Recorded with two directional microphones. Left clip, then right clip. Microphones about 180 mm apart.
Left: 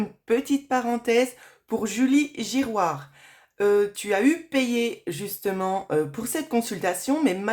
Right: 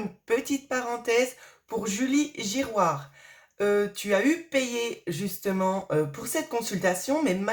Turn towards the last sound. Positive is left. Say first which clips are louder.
# left 2 dB
turn(degrees=30)  # may be behind; listen again after turning